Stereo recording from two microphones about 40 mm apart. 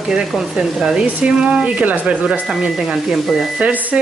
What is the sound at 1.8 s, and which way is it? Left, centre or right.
Frying, right.